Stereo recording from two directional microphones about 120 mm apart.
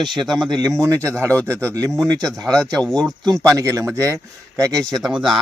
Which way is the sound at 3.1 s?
30° right (ahead or behind).